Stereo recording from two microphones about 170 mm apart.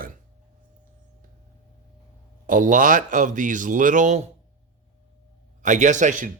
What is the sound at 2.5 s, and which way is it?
Speech, 50° right (ahead or behind).